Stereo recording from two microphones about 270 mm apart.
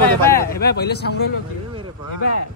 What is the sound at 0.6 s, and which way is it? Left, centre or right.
Speech, left.